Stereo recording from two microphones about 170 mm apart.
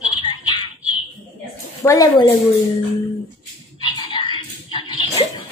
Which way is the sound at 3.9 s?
25° left (ahead or behind).